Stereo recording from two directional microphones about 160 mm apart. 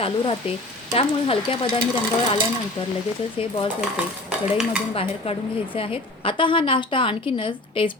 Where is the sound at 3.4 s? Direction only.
35° left (ahead or behind).